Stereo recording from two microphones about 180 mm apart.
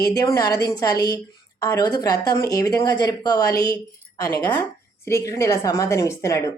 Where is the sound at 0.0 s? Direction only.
20° left (ahead or behind).